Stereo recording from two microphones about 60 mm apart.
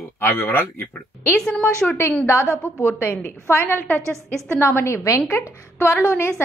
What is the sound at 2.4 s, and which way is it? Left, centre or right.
Speech, right.